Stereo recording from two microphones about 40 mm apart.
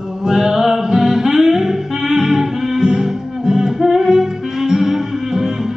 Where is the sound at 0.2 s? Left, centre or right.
Centre.